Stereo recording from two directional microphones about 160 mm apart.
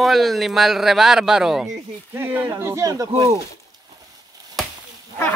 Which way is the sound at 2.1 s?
15° right (ahead or behind).